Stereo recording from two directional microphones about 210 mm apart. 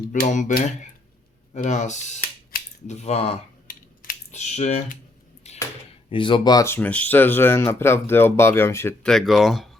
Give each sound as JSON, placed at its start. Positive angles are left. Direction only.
{"t": 0.1, "sound": "speech", "side_deg": 35}
{"t": 3.7, "sound": "typing", "side_deg": 40}
{"t": 5.5, "sound": "a sound", "side_deg": 30}
{"t": 6.1, "sound": "speech", "side_deg": 25}